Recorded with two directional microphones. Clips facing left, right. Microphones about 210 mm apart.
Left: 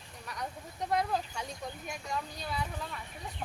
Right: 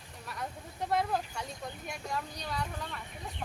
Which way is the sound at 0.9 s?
Centre (ahead or behind).